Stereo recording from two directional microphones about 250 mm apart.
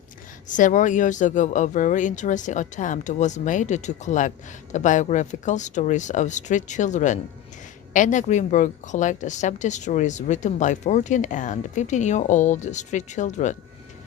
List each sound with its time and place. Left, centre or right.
0.4 s a woman's voice: left